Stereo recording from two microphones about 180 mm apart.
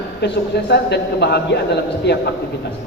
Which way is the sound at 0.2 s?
70° left (ahead or behind).